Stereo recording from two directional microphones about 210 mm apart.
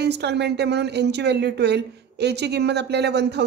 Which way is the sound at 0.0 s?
55° right (ahead or behind).